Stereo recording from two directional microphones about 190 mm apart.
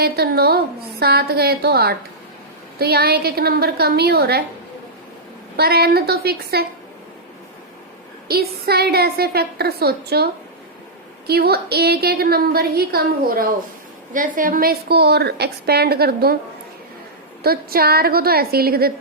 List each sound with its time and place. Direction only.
0.0 s a woman's voice: 55° right (ahead or behind)
5.5 s a woman's voice: 55° right (ahead or behind)
8.3 s a woman's voice: 55° right (ahead or behind)
11.3 s a woman's voice: 55° right (ahead or behind)
17.4 s a woman's voice: 55° right (ahead or behind)